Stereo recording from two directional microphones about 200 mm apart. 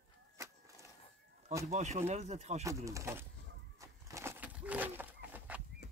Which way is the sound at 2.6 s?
15° right (ahead or behind).